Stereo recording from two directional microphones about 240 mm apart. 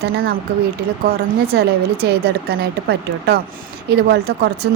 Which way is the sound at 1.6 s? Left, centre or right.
Right.